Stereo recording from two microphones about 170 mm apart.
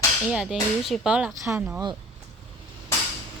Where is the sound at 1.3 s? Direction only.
15° right (ahead or behind).